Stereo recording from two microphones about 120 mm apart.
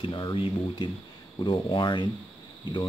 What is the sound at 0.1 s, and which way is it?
Speech, 45° left (ahead or behind).